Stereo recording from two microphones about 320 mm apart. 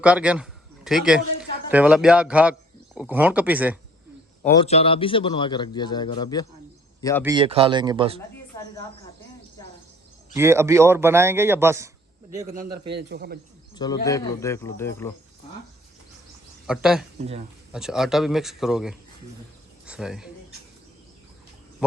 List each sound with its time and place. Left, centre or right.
0.0 s a man's voice: centre
4.6 s a man's voice: centre
7.3 s a man's voice: centre
8.5 s a sound: centre
10.3 s a man's voice: centre
12.8 s a man's voice: right
13.7 s a man's voice: centre
16.6 s a man's voice: centre
17.2 s speech: centre
17.7 s a man's voice: centre